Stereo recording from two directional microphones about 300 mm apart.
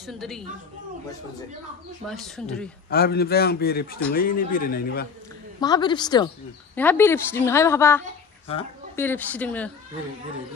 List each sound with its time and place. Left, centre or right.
0.0 s speech: centre
2.0 s speech: centre
2.9 s a man's voice: left
5.6 s speech: centre